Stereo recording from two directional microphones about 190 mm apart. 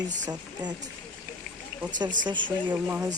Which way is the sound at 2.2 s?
25° right (ahead or behind).